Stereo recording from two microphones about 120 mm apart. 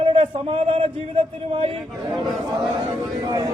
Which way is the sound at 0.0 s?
50° right (ahead or behind).